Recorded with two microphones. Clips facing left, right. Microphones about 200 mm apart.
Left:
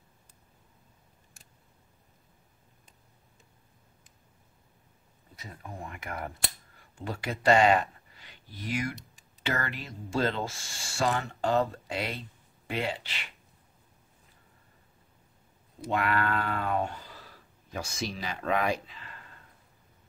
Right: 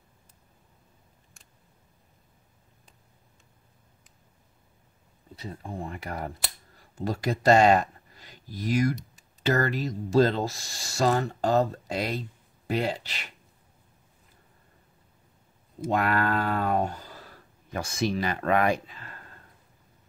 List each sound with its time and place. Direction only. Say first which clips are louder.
5.3 s speech: right 7 dB; 30° right (ahead or behind)
15.9 s speech: right 3 dB; 40° right (ahead or behind)